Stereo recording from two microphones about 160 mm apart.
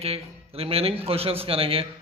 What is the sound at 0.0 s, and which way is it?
A man's voice, 40° right (ahead or behind).